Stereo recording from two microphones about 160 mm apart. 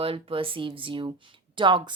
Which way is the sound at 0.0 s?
35° right (ahead or behind).